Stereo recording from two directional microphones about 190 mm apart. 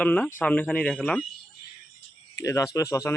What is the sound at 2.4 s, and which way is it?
Speech, 15° left (ahead or behind).